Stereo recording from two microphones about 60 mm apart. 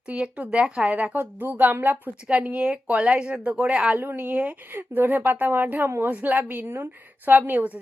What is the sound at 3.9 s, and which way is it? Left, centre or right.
A woman's voice, right.